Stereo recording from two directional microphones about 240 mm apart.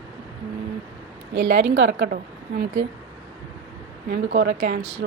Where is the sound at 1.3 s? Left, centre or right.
Right.